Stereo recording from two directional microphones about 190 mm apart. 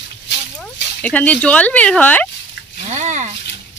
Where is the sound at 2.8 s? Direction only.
40° right (ahead or behind).